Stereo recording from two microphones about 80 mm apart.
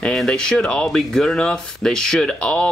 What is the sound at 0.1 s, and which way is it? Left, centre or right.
Speech, centre.